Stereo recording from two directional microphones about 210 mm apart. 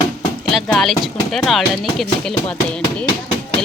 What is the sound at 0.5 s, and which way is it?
Speech, centre (ahead or behind).